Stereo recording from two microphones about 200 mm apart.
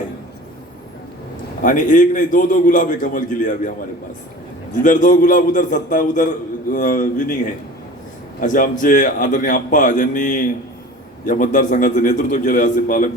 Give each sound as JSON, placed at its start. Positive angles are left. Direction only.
{"t": 1.6, "sound": "a man's voice", "side_deg": 40}
{"t": 4.8, "sound": "a man's voice", "side_deg": 40}
{"t": 8.4, "sound": "a man's voice", "side_deg": 40}